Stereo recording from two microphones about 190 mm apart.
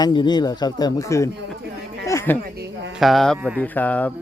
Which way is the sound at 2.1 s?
10° left (ahead or behind).